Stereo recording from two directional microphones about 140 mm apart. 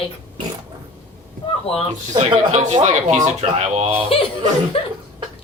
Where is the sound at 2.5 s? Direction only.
55° right (ahead or behind).